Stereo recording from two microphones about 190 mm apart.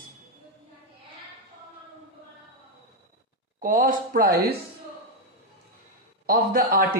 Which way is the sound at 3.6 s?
45° right (ahead or behind).